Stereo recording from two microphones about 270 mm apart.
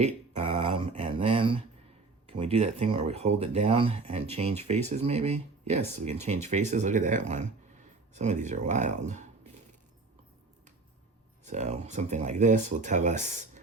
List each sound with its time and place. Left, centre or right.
0.0 s speech: right
11.4 s speech: right